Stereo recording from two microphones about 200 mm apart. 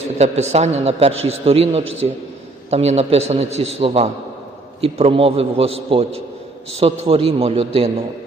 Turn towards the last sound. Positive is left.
turn(degrees=-30)  # may be behind; listen again after turning